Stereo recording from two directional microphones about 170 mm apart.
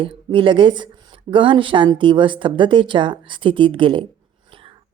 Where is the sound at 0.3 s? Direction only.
30° right (ahead or behind).